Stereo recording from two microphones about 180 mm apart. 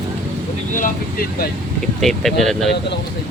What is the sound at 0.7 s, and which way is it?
Speech, 50° left (ahead or behind).